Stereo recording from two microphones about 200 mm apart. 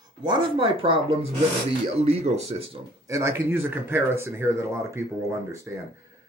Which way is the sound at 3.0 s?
15° right (ahead or behind).